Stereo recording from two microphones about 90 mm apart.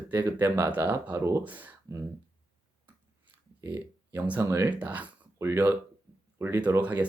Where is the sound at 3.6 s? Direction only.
30° right (ahead or behind).